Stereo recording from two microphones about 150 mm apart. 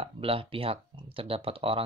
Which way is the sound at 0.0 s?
40° right (ahead or behind).